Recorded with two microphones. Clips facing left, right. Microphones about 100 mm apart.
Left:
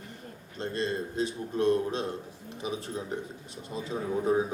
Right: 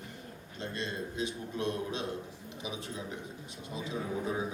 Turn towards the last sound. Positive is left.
turn(degrees=40)  # may be behind; listen again after turning